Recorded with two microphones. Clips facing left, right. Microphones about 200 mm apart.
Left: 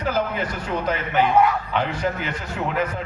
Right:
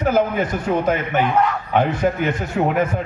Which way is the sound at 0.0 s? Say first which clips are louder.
Right 6 dB; 50° right (ahead or behind).